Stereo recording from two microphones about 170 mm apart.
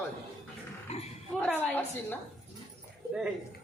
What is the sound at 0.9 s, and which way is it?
Speech, 40° left (ahead or behind).